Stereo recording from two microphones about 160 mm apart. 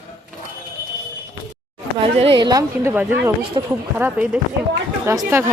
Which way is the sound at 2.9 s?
10° right (ahead or behind).